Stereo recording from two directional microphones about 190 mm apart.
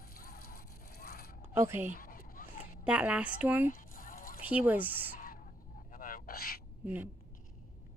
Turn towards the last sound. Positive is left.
turn(degrees=-10)  # may be behind; listen again after turning